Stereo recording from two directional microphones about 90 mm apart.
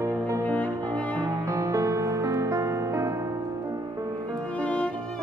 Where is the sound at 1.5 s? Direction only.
35° right (ahead or behind).